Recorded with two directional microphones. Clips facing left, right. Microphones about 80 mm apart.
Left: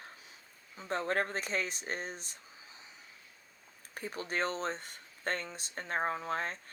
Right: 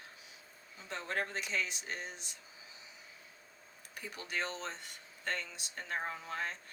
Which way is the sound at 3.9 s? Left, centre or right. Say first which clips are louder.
Left 4 dB; left.